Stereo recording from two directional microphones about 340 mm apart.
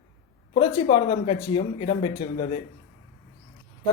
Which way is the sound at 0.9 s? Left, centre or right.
Centre.